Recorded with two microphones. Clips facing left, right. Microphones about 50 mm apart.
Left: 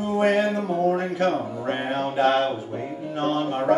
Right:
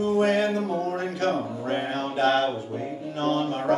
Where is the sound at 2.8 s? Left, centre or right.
Left.